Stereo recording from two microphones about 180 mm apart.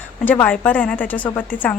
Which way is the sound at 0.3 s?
10° left (ahead or behind).